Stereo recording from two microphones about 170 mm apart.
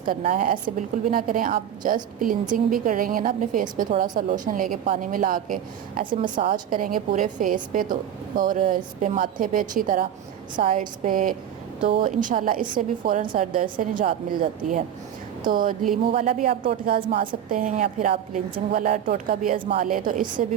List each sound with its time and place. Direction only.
0.0 s a woman's voice: 55° right (ahead or behind)